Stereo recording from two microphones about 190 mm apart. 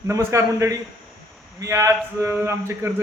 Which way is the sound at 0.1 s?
15° right (ahead or behind).